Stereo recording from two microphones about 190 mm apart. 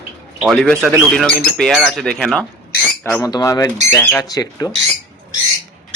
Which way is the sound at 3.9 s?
10° left (ahead or behind).